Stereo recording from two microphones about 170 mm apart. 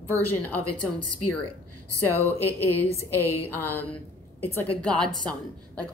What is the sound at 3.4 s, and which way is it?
A woman's voice, 15° left (ahead or behind).